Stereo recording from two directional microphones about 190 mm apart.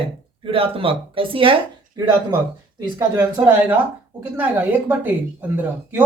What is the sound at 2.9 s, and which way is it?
Speech, 15° right (ahead or behind).